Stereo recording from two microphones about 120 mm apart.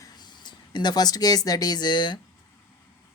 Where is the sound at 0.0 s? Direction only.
35° left (ahead or behind).